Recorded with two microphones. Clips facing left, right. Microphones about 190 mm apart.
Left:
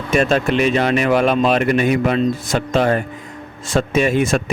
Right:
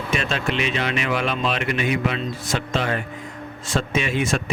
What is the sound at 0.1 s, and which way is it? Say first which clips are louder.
Speech: left 10 dB; 45° left (ahead or behind).